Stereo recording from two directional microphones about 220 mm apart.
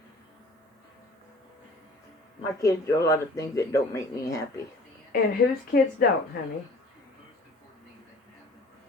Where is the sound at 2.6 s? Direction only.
15° left (ahead or behind).